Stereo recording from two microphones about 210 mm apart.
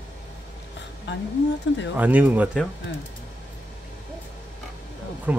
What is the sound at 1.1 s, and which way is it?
Speech, 60° left (ahead or behind).